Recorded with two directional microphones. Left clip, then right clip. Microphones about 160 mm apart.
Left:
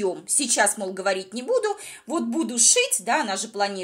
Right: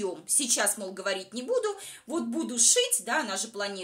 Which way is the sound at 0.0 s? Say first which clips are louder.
Left 6 dB; 25° left (ahead or behind).